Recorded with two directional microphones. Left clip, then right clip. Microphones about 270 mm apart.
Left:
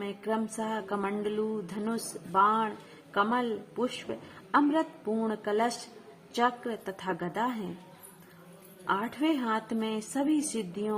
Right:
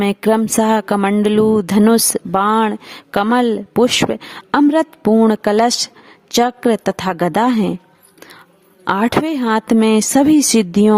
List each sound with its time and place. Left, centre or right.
0.0 s speech: right
8.8 s speech: right